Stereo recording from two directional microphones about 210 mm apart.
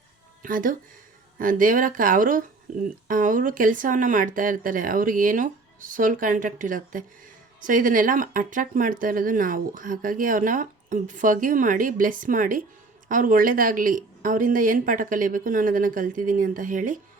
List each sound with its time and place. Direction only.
0.4 s speech: 40° right (ahead or behind)